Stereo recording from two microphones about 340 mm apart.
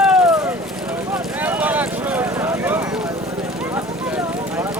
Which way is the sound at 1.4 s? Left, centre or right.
Centre.